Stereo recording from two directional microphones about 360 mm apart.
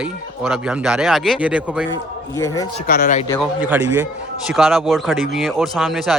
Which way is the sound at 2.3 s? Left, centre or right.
Centre.